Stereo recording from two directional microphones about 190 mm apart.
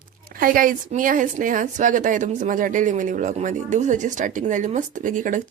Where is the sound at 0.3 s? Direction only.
45° right (ahead or behind).